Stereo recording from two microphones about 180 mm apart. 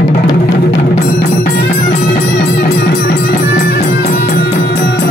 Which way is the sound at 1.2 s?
55° left (ahead or behind).